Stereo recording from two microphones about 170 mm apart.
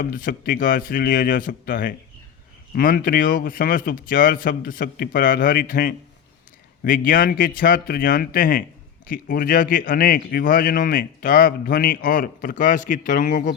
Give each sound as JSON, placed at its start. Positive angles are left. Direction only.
{"t": 0.0, "sound": "a man's voice", "side_deg": 55}